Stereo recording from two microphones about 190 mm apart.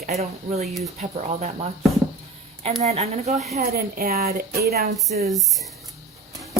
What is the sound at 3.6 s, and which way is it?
Speech, 50° right (ahead or behind).